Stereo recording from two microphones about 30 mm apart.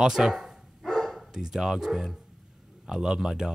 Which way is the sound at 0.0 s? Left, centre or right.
Centre.